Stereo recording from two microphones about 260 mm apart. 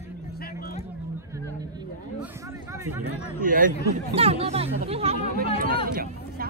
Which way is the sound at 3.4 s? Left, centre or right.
Right.